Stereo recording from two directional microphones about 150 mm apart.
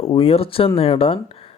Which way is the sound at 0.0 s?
40° left (ahead or behind).